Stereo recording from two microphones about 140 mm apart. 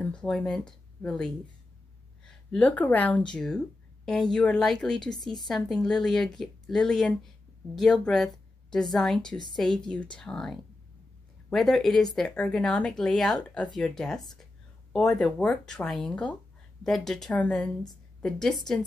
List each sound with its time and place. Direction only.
0.0 s speech: 5° left (ahead or behind)